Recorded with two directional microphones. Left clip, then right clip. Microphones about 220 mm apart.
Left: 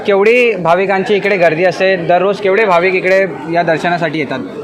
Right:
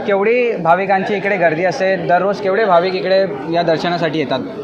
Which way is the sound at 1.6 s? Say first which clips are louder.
Left 4 dB; 60° left (ahead or behind).